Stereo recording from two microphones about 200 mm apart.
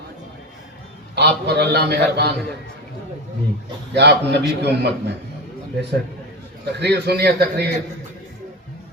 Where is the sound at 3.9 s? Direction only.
55° right (ahead or behind).